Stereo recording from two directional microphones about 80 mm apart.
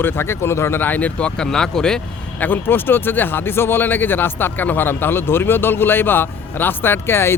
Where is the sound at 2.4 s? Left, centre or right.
Left.